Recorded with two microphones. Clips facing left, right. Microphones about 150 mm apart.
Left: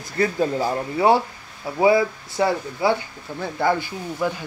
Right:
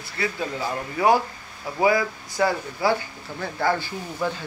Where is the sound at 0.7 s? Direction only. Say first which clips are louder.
Even; 30° left (ahead or behind).